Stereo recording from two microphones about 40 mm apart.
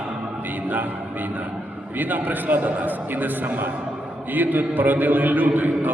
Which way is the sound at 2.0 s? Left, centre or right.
Right.